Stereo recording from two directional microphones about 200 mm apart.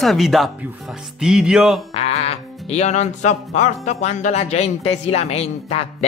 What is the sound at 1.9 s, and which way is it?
Speech, 30° left (ahead or behind).